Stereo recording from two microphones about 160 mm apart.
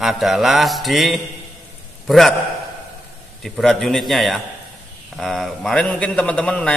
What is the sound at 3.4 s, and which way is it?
A man's voice, centre (ahead or behind).